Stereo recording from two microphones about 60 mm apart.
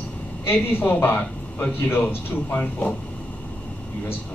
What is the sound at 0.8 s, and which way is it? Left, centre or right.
A man's voice, left.